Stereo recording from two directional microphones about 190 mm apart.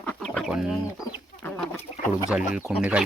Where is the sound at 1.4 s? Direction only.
10° left (ahead or behind).